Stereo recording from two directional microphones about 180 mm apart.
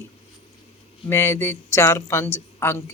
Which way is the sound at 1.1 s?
15° left (ahead or behind).